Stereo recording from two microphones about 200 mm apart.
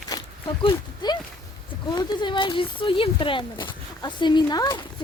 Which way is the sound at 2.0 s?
20° left (ahead or behind).